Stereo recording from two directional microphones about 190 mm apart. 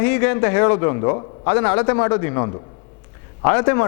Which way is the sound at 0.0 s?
10° left (ahead or behind).